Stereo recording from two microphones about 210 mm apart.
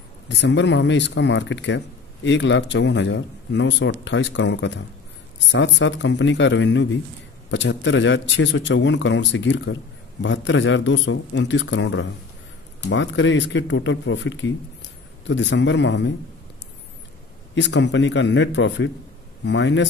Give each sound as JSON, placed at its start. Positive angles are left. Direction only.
{"t": 0.3, "sound": "speech", "side_deg": 55}
{"t": 17.6, "sound": "speech", "side_deg": 60}